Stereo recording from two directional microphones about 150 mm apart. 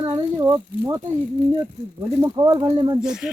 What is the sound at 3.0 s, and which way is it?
Speech, 5° right (ahead or behind).